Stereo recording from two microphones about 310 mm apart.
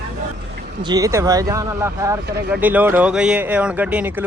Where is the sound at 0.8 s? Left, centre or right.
Centre.